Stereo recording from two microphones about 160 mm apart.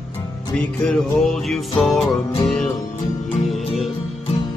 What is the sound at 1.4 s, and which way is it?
Music, centre (ahead or behind).